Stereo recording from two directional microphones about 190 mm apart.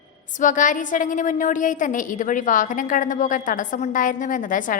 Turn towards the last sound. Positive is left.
turn(degrees=45)  # may be behind; listen again after turning